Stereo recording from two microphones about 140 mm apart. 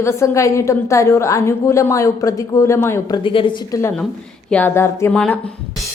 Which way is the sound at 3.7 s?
20° left (ahead or behind).